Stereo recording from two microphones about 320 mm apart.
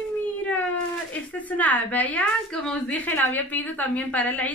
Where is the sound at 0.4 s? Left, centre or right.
Centre.